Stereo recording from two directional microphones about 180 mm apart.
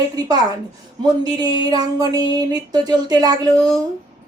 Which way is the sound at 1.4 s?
20° right (ahead or behind).